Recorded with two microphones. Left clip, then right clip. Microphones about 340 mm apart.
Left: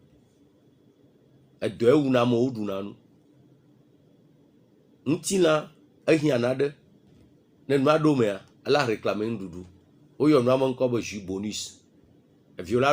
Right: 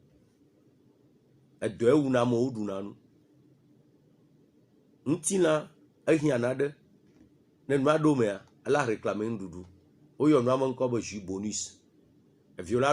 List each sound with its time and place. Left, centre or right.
1.5 s speech: right
5.0 s speech: right
6.1 s speech: right
12.5 s a man's voice: right